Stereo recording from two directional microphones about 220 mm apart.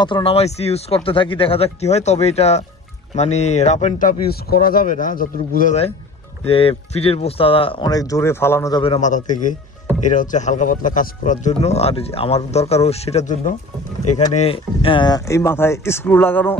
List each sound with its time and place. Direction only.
0.0 s speech: 25° left (ahead or behind)
6.4 s speech: 25° left (ahead or behind); by 16.5 s 10° left (ahead or behind)